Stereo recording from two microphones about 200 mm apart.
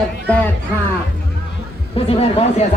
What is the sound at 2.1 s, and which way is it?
Speech, 30° left (ahead or behind).